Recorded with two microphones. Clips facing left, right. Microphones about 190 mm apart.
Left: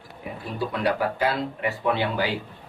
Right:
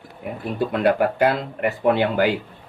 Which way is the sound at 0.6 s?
55° right (ahead or behind).